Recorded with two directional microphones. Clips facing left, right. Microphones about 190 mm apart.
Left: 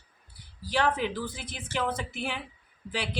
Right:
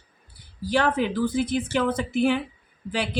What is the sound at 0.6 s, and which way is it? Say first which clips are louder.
Speech: right 5 dB; 50° right (ahead or behind).